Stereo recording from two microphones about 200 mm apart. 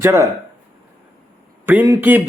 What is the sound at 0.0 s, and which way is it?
Speech, 15° right (ahead or behind).